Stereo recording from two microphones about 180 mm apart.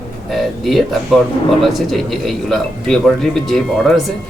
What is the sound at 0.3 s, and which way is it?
Speech, centre (ahead or behind).